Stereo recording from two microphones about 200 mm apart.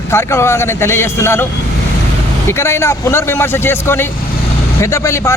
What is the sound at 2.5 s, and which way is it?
Speech, 15° left (ahead or behind).